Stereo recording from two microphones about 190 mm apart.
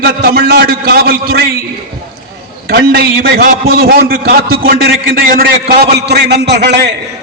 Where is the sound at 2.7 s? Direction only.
55° right (ahead or behind).